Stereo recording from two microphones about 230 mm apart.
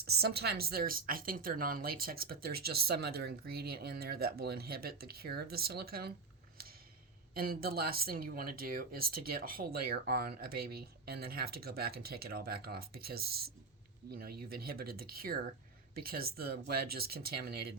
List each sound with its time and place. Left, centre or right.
0.0 s a woman's voice: right
7.3 s a woman's voice: right